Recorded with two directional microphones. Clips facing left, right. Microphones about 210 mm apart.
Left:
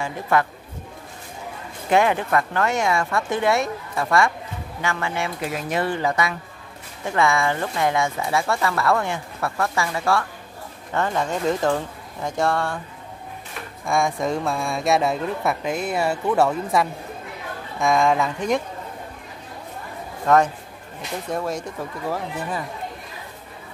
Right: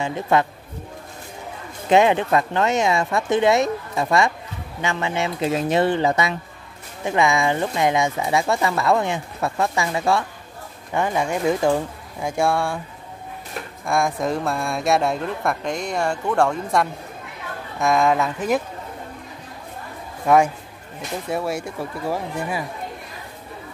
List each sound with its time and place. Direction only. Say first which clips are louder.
0.0 s speech: right 2 dB; 20° right (ahead or behind)
1.9 s speech: right 3 dB; 20° right (ahead or behind)
13.8 s speech: even; centre (ahead or behind)
20.2 s speech: right 1 dB; 10° right (ahead or behind)